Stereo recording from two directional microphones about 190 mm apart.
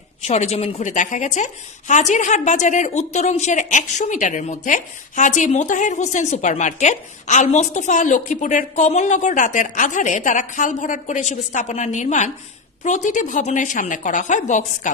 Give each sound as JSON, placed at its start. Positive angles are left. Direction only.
{"t": 0.3, "sound": "a woman's voice", "side_deg": 35}